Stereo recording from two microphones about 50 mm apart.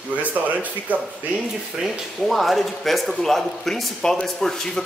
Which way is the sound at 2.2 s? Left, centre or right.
Centre.